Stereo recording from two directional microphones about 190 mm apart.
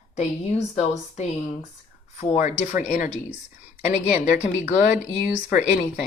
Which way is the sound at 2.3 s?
40° left (ahead or behind).